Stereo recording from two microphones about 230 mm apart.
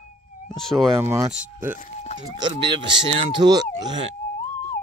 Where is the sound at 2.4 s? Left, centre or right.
Centre.